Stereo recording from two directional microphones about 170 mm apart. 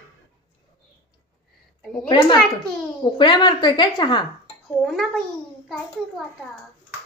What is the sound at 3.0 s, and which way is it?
A woman's voice, 25° left (ahead or behind).